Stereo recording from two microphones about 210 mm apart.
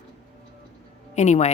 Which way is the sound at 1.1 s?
35° left (ahead or behind).